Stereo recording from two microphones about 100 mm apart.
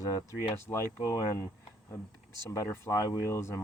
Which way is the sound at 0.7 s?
35° left (ahead or behind).